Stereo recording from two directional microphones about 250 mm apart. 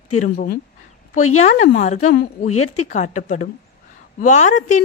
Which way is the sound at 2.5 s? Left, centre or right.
Left.